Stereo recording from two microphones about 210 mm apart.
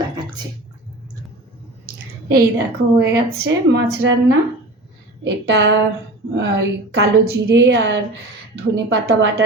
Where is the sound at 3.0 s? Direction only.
50° right (ahead or behind).